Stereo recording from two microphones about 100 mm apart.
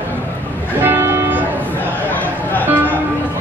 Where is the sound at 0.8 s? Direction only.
25° right (ahead or behind).